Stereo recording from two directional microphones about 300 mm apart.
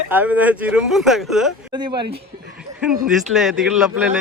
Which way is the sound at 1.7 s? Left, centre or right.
Centre.